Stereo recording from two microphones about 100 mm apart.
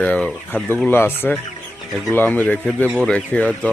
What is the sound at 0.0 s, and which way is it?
Speech, 15° left (ahead or behind).